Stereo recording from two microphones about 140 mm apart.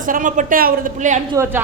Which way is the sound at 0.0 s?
70° right (ahead or behind).